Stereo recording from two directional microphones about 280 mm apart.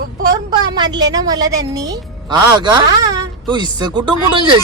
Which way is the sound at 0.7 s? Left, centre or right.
Centre.